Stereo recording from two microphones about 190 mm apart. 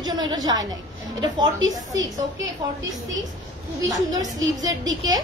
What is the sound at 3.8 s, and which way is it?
Speech, 20° right (ahead or behind).